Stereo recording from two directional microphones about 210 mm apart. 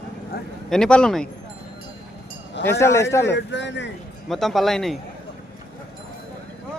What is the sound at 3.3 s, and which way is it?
Speech, 55° left (ahead or behind).